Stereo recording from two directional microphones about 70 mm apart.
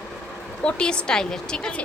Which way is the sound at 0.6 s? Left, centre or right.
Centre.